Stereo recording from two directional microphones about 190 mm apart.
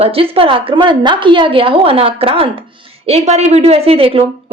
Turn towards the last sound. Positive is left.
turn(degrees=-30)  # may be behind; listen again after turning